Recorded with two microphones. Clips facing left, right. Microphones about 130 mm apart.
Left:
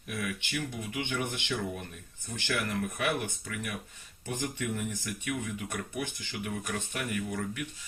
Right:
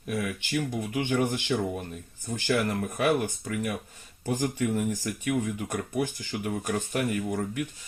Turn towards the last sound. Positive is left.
turn(degrees=-40)  # may be behind; listen again after turning